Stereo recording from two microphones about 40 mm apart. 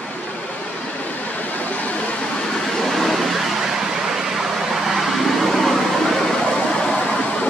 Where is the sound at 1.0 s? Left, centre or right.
Left.